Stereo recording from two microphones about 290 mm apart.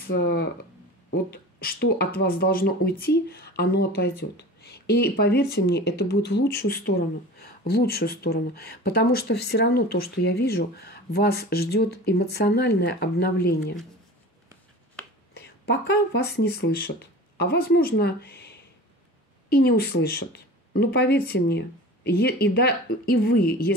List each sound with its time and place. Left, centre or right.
0.0 s speech: left
15.3 s speech: left